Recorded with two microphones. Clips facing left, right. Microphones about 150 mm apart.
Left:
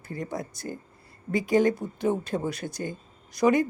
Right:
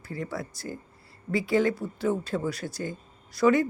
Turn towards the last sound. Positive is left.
turn(degrees=15)  # may be behind; listen again after turning